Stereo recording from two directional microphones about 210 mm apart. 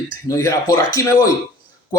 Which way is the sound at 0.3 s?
15° left (ahead or behind).